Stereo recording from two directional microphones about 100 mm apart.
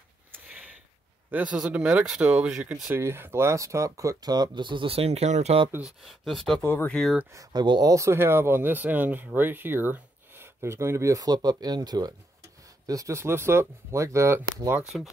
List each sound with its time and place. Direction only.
1.3 s speech: 15° right (ahead or behind); by 5.7 s 90° right
5.8 s speech: centre (ahead or behind)
6.6 s speech: 20° left (ahead or behind)
7.3 s speech: 45° right (ahead or behind)
7.9 s speech: 30° right (ahead or behind)